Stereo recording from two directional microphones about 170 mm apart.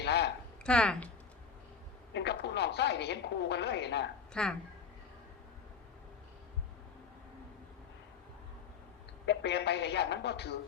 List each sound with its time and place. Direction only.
0.0 s a sound: 80° left
0.6 s speech: 5° left (ahead or behind)
2.1 s speech: 85° left
4.4 s speech: 5° left (ahead or behind)
9.2 s speech: 90° left